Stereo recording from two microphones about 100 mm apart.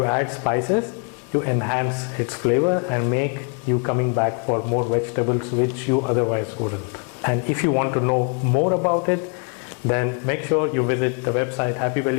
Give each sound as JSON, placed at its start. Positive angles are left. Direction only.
{"t": 0.0, "sound": "a man's voice", "side_deg": 15}